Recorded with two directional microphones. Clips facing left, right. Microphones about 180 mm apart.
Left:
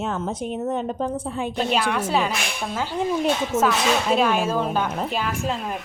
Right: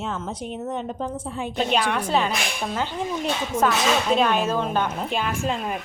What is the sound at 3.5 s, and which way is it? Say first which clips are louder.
Speech: even; 25° left (ahead or behind).